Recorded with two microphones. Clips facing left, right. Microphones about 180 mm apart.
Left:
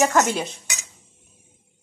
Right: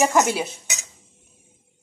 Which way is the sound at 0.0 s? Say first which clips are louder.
Even; 10° right (ahead or behind).